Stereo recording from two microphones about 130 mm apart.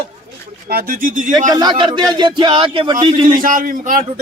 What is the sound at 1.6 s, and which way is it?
A man's voice, 35° right (ahead or behind).